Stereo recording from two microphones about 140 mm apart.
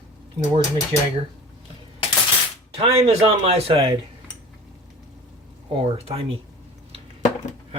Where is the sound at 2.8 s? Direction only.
45° right (ahead or behind).